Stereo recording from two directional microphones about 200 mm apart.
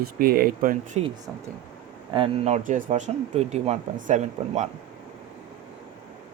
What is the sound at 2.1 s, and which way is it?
Speech, 30° right (ahead or behind).